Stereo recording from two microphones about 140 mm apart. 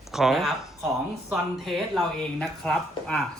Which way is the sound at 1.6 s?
Centre (ahead or behind).